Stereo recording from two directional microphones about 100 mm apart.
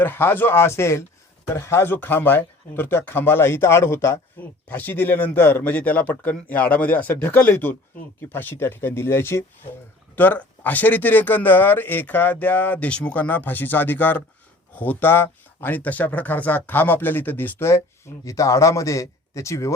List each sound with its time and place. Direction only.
0.0 s a man's voice: 20° left (ahead or behind)